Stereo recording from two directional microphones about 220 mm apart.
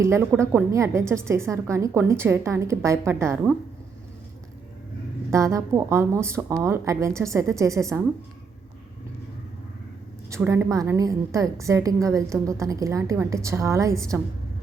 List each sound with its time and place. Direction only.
0.0 s a woman's voice: 10° right (ahead or behind)
5.3 s a woman's voice: 15° right (ahead or behind)
10.2 s a woman's voice: 15° right (ahead or behind)